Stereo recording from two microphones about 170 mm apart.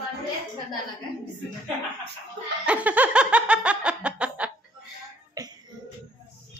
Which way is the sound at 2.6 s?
10° right (ahead or behind).